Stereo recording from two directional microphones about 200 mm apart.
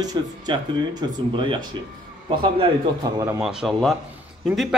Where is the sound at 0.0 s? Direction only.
20° right (ahead or behind).